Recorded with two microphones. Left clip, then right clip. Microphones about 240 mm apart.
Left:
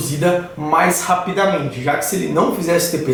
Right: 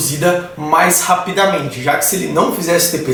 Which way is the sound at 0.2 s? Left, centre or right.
Centre.